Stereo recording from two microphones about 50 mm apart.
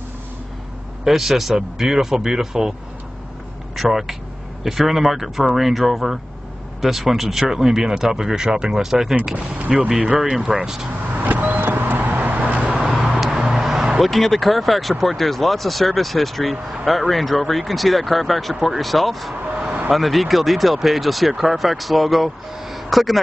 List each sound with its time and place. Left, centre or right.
1.0 s speech: centre
3.7 s speech: centre
9.9 s speech: right
10.6 s speech: centre
10.9 s vehicle: right
14.0 s speech: centre